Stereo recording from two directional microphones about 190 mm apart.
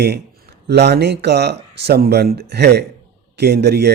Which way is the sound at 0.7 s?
60° right (ahead or behind).